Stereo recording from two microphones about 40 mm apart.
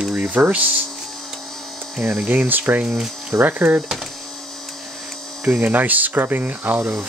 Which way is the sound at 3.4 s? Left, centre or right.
Right.